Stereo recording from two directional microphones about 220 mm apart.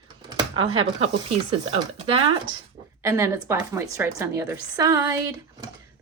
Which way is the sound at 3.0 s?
10° right (ahead or behind).